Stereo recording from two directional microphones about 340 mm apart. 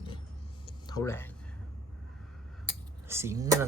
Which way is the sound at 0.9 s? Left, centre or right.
Centre.